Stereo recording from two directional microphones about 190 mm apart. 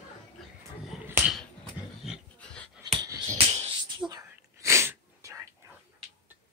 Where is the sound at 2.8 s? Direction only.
25° right (ahead or behind).